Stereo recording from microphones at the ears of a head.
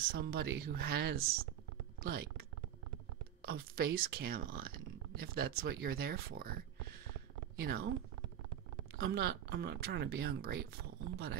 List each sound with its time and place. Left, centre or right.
0.0 s speech: right